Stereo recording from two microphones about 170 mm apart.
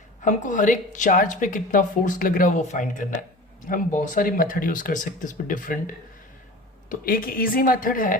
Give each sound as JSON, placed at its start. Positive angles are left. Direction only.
{"t": 0.3, "sound": "speech", "side_deg": 50}
{"t": 6.9, "sound": "a woman's voice", "side_deg": 55}